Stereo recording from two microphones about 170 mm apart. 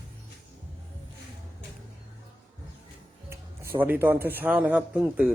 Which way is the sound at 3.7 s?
10° right (ahead or behind).